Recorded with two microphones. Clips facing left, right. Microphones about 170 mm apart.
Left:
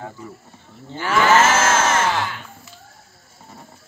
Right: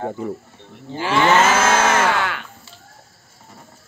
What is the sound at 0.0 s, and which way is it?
Speech, 55° right (ahead or behind).